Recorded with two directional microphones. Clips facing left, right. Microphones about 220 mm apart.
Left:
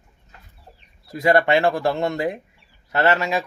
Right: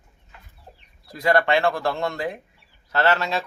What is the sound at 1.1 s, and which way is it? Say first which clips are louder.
Speech: left 3 dB; 25° left (ahead or behind).